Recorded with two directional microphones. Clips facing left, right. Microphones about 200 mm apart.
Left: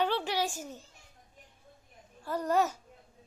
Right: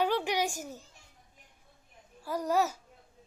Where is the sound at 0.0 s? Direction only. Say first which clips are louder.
Right 1 dB; 10° right (ahead or behind).